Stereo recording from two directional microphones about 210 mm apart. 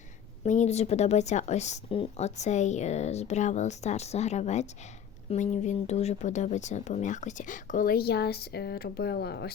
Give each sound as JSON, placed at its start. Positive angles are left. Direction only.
{"t": 0.4, "sound": "a woman's voice", "side_deg": 35}